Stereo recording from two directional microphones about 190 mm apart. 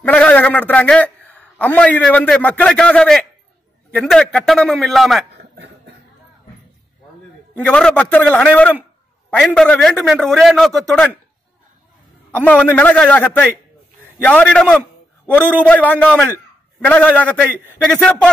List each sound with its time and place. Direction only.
0.0 s a man's voice: 5° left (ahead or behind)
5.3 s a sound: 60° right (ahead or behind)
7.5 s a man's voice: 5° left (ahead or behind)
12.3 s a man's voice: 10° left (ahead or behind)